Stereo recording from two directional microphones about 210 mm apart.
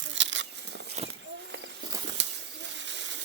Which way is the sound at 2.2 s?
60° right (ahead or behind).